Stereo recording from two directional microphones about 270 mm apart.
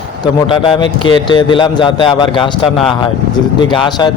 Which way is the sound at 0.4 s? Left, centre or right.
Centre.